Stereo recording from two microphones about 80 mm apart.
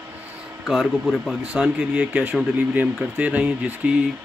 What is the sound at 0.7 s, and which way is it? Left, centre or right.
Speech, centre.